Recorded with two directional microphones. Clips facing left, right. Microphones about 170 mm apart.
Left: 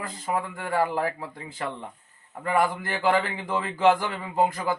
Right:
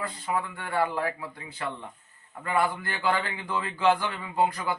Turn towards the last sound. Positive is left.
turn(degrees=45)  # may be behind; listen again after turning